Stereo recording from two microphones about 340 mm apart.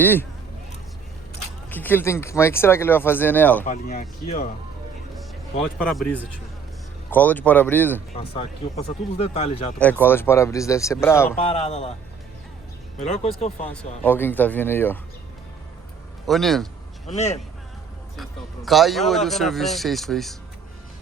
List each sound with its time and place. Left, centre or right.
0.0 s speech: centre
1.7 s speech: centre
3.6 s speech: left
5.8 s speech: centre
8.1 s speech: centre
9.7 s speech: centre
11.4 s speech: centre
13.0 s speech: centre
13.7 s speech: centre
16.2 s speech: centre
17.1 s speech: centre
18.2 s speech: centre